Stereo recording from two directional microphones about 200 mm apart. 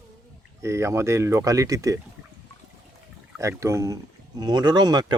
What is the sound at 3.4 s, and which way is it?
Speech, 15° right (ahead or behind).